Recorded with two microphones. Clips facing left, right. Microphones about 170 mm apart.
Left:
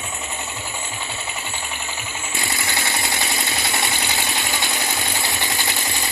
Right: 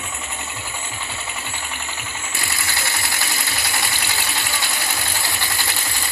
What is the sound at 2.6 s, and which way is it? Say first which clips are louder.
Ratchet: left 2 dB; 20° left (ahead or behind).